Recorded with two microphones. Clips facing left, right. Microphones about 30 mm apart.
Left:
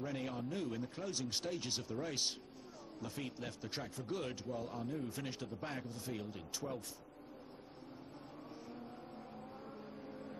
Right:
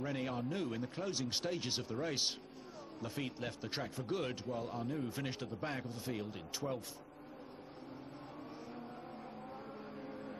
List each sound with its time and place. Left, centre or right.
0.0 s a man's voice: centre
10.0 s vehicle: centre